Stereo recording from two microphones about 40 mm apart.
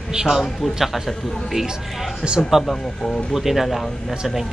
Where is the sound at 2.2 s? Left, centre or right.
Right.